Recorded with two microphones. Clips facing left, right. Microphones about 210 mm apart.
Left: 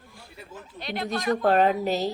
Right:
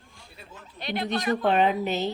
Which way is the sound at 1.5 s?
40° left (ahead or behind).